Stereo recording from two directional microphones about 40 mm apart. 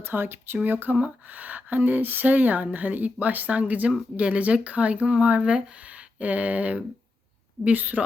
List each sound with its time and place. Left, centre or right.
0.0 s speech: right